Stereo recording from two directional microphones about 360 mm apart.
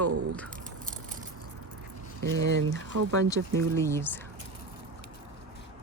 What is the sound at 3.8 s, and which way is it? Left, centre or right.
Speech, centre.